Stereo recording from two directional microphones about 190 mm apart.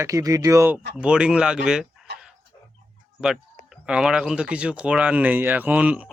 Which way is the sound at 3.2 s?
5° right (ahead or behind).